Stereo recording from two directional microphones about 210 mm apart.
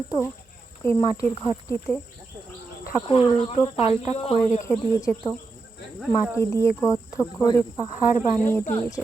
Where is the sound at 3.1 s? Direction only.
25° left (ahead or behind).